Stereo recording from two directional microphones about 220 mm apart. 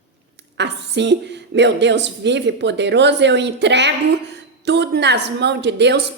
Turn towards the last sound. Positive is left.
turn(degrees=-50)  # may be behind; listen again after turning